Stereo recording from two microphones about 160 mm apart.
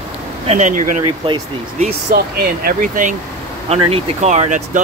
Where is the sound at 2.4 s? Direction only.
60° right (ahead or behind).